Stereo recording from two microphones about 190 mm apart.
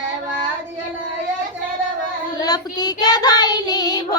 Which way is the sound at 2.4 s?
20° left (ahead or behind).